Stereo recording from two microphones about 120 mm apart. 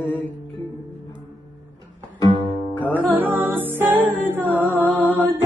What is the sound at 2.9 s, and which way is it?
Music, 15° right (ahead or behind).